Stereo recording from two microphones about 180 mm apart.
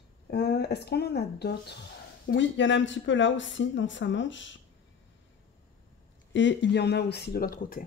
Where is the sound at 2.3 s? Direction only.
90° left.